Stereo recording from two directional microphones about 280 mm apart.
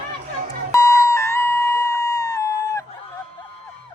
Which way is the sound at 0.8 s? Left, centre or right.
Centre.